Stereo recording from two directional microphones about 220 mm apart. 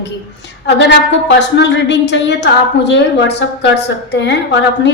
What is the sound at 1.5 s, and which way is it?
A woman's voice, 55° left (ahead or behind).